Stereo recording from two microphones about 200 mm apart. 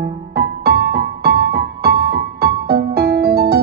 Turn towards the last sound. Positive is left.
turn(degrees=-50)  # may be behind; listen again after turning